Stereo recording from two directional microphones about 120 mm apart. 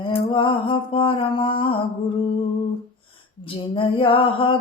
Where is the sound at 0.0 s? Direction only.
45° left (ahead or behind).